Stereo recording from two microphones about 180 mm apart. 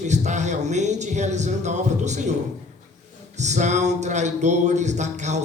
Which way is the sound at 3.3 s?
40° right (ahead or behind).